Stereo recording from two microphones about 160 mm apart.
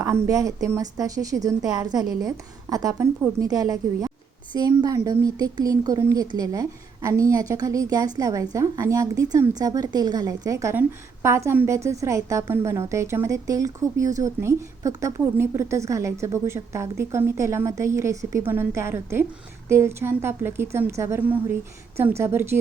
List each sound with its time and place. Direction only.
0.3 s a woman's voice: 20° right (ahead or behind)